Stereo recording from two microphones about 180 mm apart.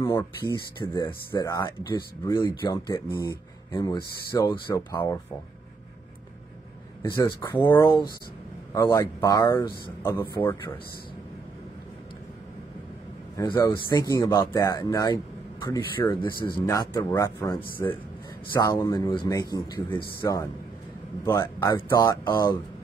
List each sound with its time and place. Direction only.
0.0 s speech: 20° left (ahead or behind)
7.2 s speech: 25° left (ahead or behind)
7.5 s speech: 10° left (ahead or behind)
13.4 s speech: 20° left (ahead or behind)